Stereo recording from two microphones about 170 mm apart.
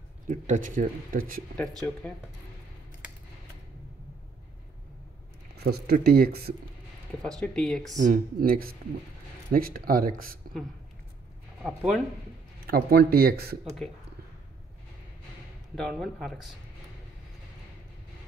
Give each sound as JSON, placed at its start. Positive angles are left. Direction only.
{"t": 0.3, "sound": "speech", "side_deg": -50}
{"t": 1.6, "sound": "speech", "side_deg": 5}
{"t": 5.6, "sound": "speech", "side_deg": -70}
{"t": 7.2, "sound": "speech", "side_deg": 5}
{"t": 8.0, "sound": "speech", "side_deg": -55}
{"t": 11.6, "sound": "speech", "side_deg": -5}
{"t": 12.5, "sound": "speech", "side_deg": -60}
{"t": 13.8, "sound": "speech", "side_deg": 5}
{"t": 15.7, "sound": "speech", "side_deg": 0}